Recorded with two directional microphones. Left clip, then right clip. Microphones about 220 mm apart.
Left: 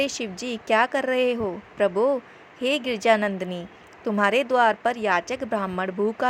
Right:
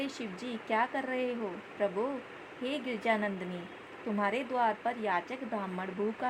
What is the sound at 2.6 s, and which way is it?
A woman's voice, 30° left (ahead or behind).